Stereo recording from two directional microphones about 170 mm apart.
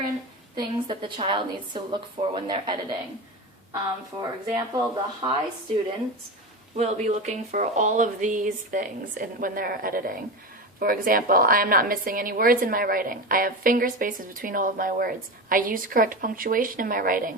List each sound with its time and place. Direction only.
0.5 s a woman's voice: 25° right (ahead or behind)
4.2 s a woman's voice: 25° right (ahead or behind)
6.7 s a woman's voice: 40° right (ahead or behind)